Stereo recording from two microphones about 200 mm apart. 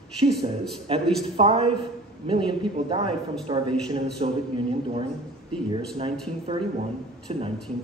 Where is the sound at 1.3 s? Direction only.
30° right (ahead or behind).